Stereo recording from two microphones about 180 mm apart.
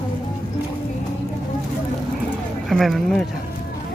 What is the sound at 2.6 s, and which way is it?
Speech, centre (ahead or behind).